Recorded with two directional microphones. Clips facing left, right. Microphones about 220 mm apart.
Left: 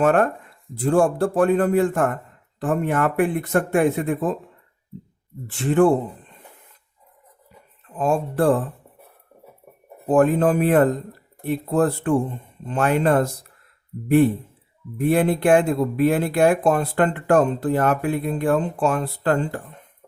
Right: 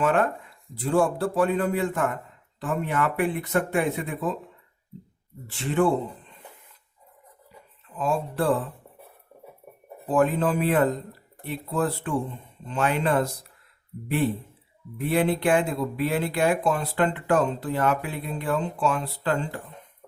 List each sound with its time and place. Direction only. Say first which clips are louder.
0.0 s speech: left 5 dB; 45° left (ahead or behind)
5.5 s speech: left 6 dB; 50° left (ahead or behind)
7.9 s speech: left 5 dB; 50° left (ahead or behind)
10.1 s speech: left 5 dB; 50° left (ahead or behind)
14.9 s speech: left 4 dB; 50° left (ahead or behind)